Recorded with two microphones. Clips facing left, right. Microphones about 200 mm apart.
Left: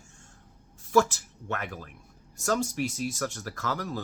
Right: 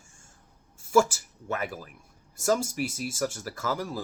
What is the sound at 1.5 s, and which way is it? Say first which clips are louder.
Speech: right 2 dB; 5° right (ahead or behind).